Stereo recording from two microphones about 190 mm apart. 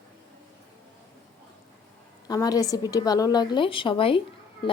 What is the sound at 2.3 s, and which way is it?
Speech, 20° left (ahead or behind).